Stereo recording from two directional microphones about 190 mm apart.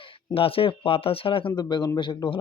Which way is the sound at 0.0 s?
25° left (ahead or behind).